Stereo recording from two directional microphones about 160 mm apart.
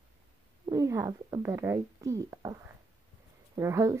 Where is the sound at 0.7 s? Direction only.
20° right (ahead or behind).